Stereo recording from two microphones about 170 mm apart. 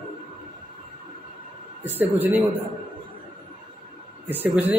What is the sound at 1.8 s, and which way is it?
Speech, 10° right (ahead or behind).